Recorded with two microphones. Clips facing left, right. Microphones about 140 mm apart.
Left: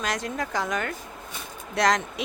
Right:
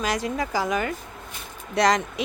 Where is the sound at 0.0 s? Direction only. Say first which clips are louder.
Right 3 dB; centre (ahead or behind).